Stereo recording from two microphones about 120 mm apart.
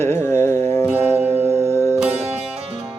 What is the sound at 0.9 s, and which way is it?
Music, 15° right (ahead or behind).